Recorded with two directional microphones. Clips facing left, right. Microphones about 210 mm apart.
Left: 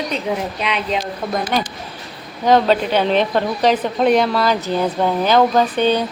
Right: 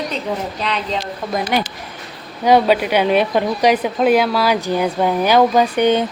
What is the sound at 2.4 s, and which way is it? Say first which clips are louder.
Speech: right 1 dB; 10° right (ahead or behind).